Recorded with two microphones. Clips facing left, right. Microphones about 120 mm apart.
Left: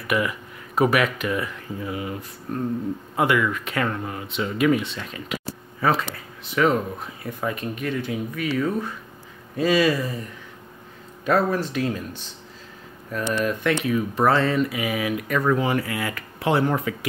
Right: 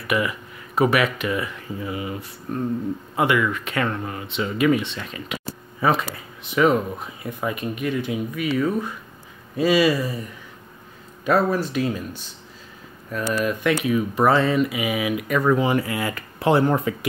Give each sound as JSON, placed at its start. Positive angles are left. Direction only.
{"t": 0.0, "sound": "speech", "side_deg": 0}
{"t": 5.8, "sound": "speech", "side_deg": -15}
{"t": 11.2, "sound": "speech", "side_deg": -5}
{"t": 13.3, "sound": "speech", "side_deg": -5}